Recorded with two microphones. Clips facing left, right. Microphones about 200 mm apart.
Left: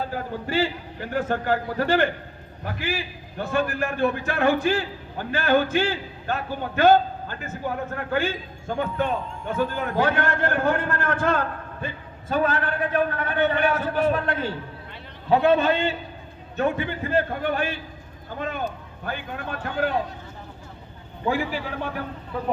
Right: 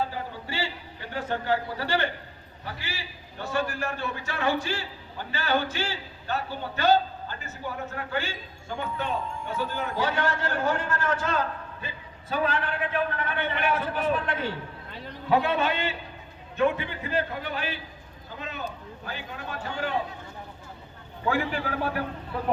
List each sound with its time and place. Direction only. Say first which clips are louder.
0.1 s a man's voice: left 8 dB; 50° left (ahead or behind)
15.3 s a man's voice: left 6 dB; 40° left (ahead or behind); by 19.9 s 55° left (ahead or behind)
21.5 s a man's voice: right 1 dB; 5° right (ahead or behind)